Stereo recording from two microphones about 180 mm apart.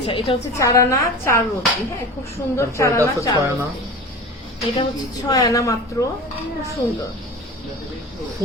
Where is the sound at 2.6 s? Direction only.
15° left (ahead or behind).